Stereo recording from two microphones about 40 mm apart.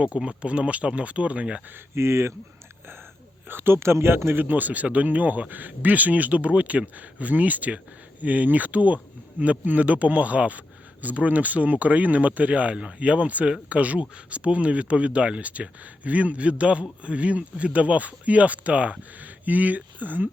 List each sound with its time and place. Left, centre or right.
0.3 s speech: right
1.7 s speech: right
3.5 s speech: right
4.4 s speech: right